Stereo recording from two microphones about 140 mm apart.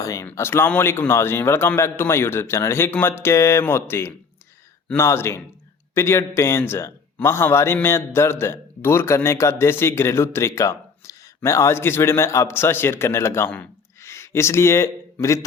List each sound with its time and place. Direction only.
0.0 s a man's voice: 25° left (ahead or behind)